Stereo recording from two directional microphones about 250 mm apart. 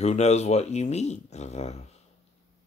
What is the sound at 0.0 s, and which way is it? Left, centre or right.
Speech, left.